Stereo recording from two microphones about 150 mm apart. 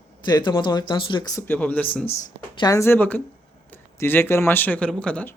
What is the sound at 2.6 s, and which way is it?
Speech, 20° left (ahead or behind).